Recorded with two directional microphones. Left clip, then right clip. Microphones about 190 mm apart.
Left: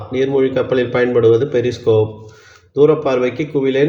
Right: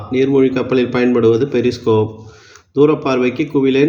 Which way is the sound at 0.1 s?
30° right (ahead or behind).